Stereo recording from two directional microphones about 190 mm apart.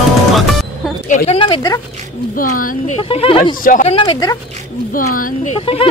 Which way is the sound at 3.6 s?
45° left (ahead or behind).